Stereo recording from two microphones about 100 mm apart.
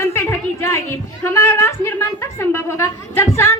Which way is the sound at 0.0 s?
25° left (ahead or behind).